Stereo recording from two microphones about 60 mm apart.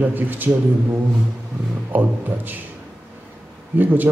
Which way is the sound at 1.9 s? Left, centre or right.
Right.